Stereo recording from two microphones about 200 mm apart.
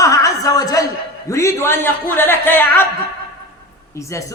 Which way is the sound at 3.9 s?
15° left (ahead or behind).